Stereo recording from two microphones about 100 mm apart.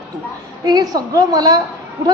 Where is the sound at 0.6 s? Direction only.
40° right (ahead or behind).